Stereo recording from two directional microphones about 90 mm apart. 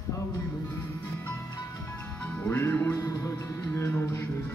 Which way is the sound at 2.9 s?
40° left (ahead or behind).